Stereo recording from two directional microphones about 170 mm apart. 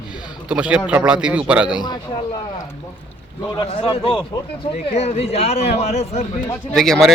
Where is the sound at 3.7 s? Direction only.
35° left (ahead or behind).